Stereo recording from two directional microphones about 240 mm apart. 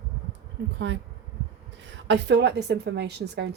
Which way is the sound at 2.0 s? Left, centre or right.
Right.